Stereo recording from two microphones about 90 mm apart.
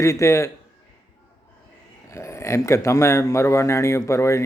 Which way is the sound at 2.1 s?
30° left (ahead or behind).